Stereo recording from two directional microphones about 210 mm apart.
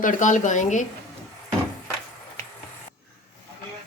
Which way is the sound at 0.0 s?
40° left (ahead or behind).